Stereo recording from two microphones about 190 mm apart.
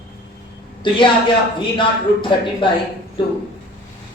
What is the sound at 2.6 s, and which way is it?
Speech, 25° left (ahead or behind).